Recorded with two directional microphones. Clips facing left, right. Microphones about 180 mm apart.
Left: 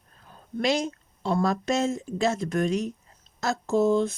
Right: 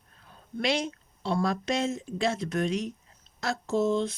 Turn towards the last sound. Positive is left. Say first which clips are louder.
# left 4 dB
turn(degrees=50)  # may be behind; listen again after turning